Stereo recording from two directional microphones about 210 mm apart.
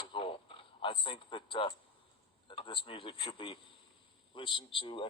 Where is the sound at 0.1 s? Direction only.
25° left (ahead or behind).